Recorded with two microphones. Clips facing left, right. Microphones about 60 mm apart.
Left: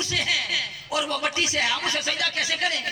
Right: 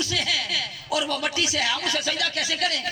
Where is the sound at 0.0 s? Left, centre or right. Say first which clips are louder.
Even; left.